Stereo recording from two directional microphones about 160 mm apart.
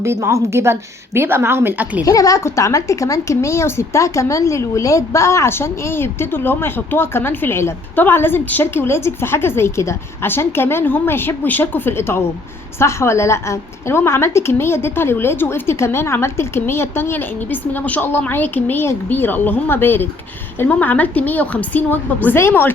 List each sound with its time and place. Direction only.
0.0 s a woman's voice: 15° right (ahead or behind)
2.0 s a woman's voice: 20° left (ahead or behind)